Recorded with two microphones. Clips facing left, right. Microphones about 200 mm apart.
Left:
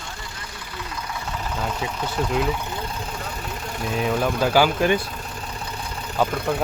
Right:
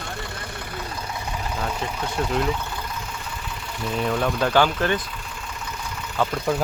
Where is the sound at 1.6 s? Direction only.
5° left (ahead or behind).